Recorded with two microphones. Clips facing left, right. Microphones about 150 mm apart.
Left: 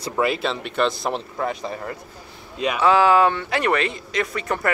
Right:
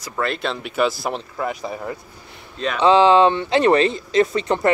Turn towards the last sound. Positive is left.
turn(degrees=-25)  # may be behind; listen again after turning